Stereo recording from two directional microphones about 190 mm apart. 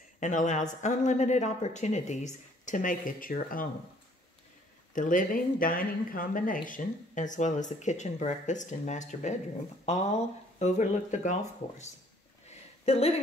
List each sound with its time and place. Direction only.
0.2 s speech: 40° left (ahead or behind)
4.9 s speech: 45° left (ahead or behind)
12.4 s a sound: 30° left (ahead or behind)